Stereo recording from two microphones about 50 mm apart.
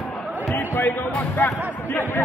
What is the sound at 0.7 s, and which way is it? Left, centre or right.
Music, left.